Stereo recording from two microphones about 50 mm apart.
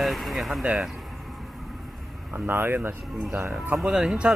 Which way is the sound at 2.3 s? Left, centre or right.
Right.